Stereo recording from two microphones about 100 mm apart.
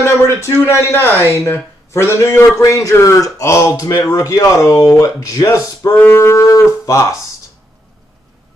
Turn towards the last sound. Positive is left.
turn(degrees=30)  # may be behind; listen again after turning